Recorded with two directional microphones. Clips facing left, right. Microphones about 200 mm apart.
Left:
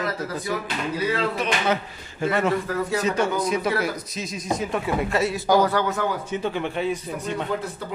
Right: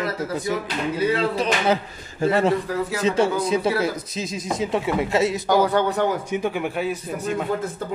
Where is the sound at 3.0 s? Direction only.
25° right (ahead or behind); by 7.4 s 5° right (ahead or behind).